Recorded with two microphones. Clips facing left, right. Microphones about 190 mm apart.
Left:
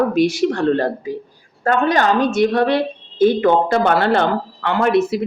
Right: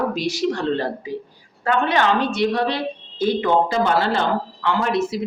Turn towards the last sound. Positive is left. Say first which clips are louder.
# left 5 dB
turn(degrees=60)  # may be behind; listen again after turning